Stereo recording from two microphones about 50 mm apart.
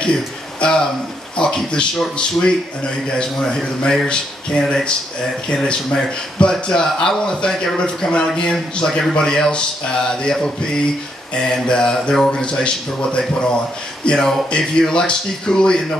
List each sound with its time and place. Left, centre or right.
0.0 s a man's voice: centre